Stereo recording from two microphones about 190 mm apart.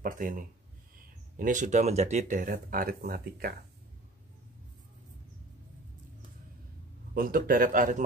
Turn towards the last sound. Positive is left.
turn(degrees=-45)  # may be behind; listen again after turning